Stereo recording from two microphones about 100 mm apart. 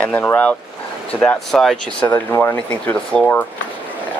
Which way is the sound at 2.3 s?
25° left (ahead or behind).